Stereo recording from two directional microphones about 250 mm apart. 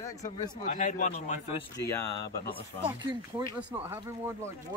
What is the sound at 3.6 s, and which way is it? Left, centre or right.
Speech, centre.